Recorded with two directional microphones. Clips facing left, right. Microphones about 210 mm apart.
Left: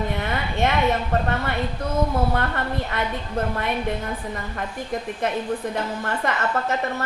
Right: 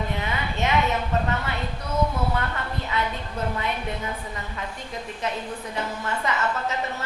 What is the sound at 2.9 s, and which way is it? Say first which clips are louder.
Speech: left 2 dB; 55° left (ahead or behind).